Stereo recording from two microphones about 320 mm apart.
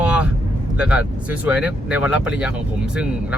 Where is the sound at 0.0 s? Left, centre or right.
Centre.